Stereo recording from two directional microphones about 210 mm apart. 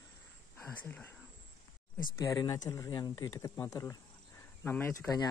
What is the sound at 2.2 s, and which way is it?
Speech, 15° left (ahead or behind).